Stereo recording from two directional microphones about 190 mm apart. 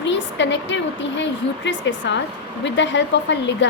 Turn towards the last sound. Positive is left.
turn(degrees=70)  # may be behind; listen again after turning